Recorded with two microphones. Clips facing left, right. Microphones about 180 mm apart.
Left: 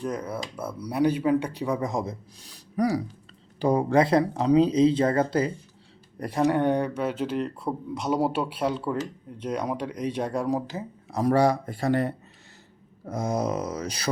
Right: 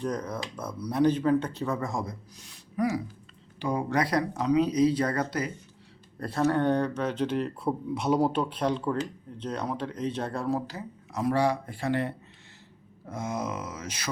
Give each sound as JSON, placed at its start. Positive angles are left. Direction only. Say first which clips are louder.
{"t": 0.0, "sound": "speech", "louder": "left 1 dB", "side_deg": 5}
{"t": 2.7, "sound": "speech", "louder": "left 3 dB", "side_deg": 40}
{"t": 6.1, "sound": "speech", "louder": "left 2 dB", "side_deg": 15}
{"t": 11.1, "sound": "speech", "louder": "left 4 dB", "side_deg": 40}